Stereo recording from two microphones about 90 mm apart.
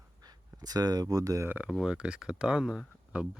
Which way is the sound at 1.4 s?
20° right (ahead or behind).